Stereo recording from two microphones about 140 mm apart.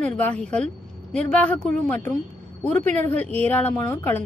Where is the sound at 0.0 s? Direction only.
10° left (ahead or behind).